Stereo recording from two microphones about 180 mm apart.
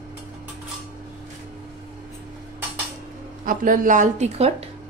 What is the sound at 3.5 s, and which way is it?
A woman's voice, 50° right (ahead or behind).